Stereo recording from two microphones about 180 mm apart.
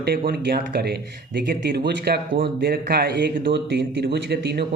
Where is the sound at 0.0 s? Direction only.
60° right (ahead or behind).